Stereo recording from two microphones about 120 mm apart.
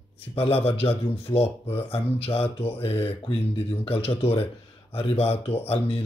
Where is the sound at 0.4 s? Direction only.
55° left (ahead or behind).